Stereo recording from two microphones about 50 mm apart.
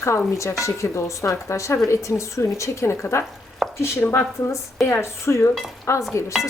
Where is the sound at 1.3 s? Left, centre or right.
Left.